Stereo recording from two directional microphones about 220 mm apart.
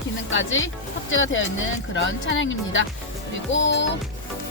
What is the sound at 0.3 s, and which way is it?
Speech, 60° left (ahead or behind).